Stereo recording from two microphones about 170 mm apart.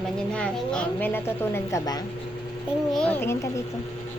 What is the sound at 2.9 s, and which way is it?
Speech, 5° left (ahead or behind).